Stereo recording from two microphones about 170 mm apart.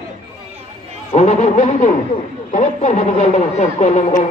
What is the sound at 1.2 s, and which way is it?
Speech, 45° left (ahead or behind).